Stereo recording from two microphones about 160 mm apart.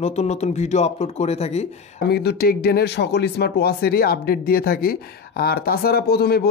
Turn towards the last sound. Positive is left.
turn(degrees=80)